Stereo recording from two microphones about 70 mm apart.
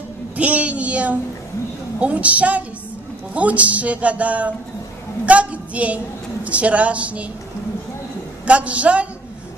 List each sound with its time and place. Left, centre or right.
0.4 s a woman's voice: centre
8.5 s speech: centre